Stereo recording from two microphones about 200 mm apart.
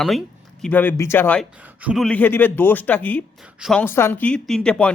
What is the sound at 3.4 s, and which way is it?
Speech, centre (ahead or behind).